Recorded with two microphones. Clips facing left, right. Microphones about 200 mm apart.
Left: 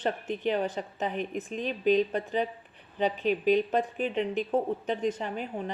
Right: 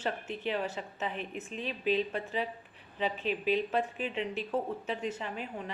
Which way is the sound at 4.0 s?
40° left (ahead or behind).